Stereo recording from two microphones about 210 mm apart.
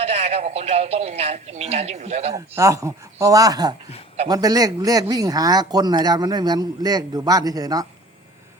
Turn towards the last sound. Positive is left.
turn(degrees=-15)  # may be behind; listen again after turning